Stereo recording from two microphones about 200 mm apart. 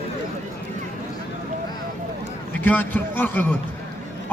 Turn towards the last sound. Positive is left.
turn(degrees=10)  # may be behind; listen again after turning